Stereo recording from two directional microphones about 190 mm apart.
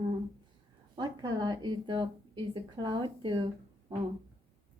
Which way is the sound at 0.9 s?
20° right (ahead or behind).